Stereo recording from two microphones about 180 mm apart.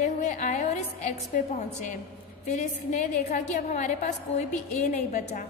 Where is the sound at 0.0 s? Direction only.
40° left (ahead or behind).